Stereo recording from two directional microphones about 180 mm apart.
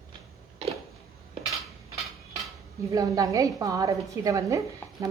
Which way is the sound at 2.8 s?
15° right (ahead or behind).